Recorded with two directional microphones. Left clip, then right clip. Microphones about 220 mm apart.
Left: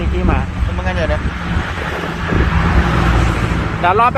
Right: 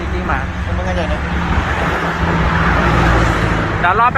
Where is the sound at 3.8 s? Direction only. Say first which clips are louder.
Left 1 dB; 40° left (ahead or behind).